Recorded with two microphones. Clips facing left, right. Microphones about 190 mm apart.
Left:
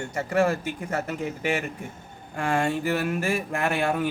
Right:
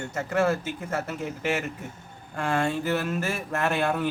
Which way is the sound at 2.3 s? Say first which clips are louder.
Left 1 dB; 10° left (ahead or behind).